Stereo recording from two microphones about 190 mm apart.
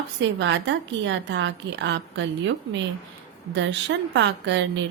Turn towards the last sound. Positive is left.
turn(degrees=-70)  # may be behind; listen again after turning